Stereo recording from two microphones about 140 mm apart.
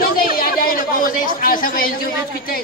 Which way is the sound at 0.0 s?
90° left.